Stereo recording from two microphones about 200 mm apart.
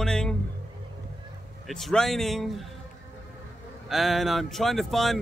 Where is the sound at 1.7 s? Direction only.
5° left (ahead or behind).